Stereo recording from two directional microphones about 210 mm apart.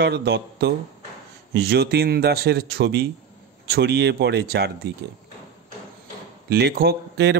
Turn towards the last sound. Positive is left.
turn(degrees=-55)  # may be behind; listen again after turning